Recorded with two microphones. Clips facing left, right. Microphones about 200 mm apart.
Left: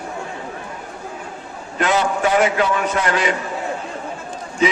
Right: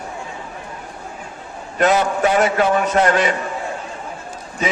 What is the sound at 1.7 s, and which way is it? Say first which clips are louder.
Speech: right 2 dB; 45° right (ahead or behind).